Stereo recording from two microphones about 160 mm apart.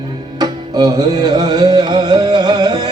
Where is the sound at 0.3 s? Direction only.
25° right (ahead or behind).